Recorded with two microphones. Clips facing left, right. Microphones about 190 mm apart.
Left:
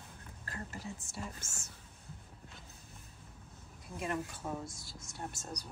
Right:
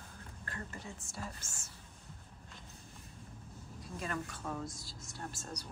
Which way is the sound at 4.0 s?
20° left (ahead or behind).